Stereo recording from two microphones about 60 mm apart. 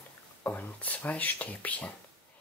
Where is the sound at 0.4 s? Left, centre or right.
Left.